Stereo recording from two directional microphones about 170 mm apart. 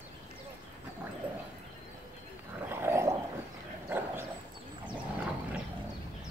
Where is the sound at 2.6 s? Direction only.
15° right (ahead or behind).